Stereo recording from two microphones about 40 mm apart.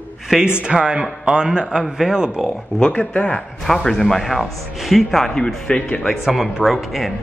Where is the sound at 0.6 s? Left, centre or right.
Right.